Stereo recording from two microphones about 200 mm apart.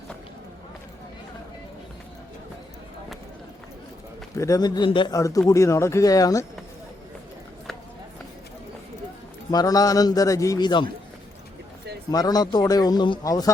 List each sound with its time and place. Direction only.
4.4 s a man's voice: 15° left (ahead or behind)
9.5 s a man's voice: 20° left (ahead or behind)
12.1 s a man's voice: 20° left (ahead or behind)